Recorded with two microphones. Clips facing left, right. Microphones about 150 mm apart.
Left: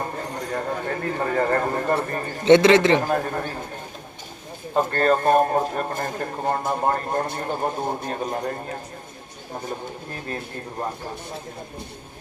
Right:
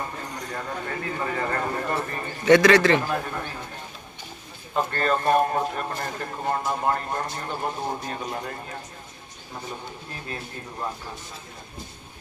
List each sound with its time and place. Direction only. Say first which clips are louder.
0.0 s a sound: left 4 dB; 40° left (ahead or behind)
2.0 s speech: left 4 dB; 40° left (ahead or behind)
2.4 s speech: left 2 dB; 25° left (ahead or behind)
3.0 s a man's voice: left 5 dB; 45° left (ahead or behind)
4.7 s a man's voice: left 5 dB; 45° left (ahead or behind)